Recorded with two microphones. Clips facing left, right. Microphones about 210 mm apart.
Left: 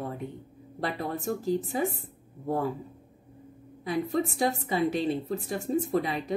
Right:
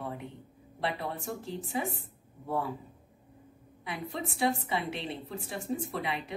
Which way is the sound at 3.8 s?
40° left (ahead or behind).